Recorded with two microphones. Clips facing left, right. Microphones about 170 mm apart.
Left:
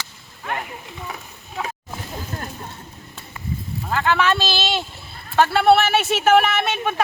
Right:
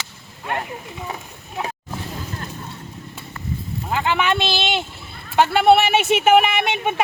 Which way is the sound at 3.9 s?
15° right (ahead or behind).